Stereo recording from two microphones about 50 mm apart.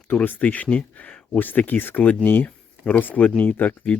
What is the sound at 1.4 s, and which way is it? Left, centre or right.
Speech, left.